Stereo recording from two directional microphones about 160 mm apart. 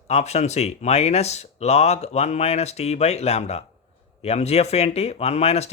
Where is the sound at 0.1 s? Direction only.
45° left (ahead or behind).